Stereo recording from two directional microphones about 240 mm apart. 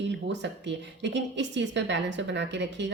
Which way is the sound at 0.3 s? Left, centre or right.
Right.